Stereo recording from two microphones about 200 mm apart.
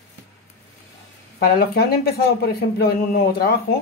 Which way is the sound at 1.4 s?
50° left (ahead or behind).